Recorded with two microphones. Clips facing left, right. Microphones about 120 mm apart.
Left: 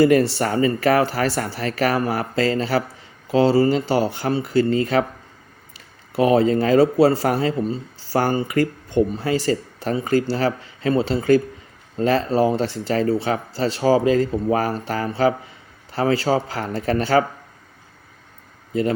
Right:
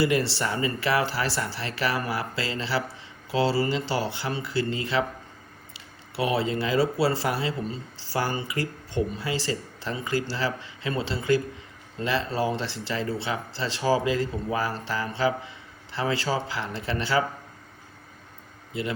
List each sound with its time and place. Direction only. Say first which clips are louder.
0.0 s speech: left 8 dB; 45° left (ahead or behind)
18.7 s speech: left 9 dB; 45° left (ahead or behind)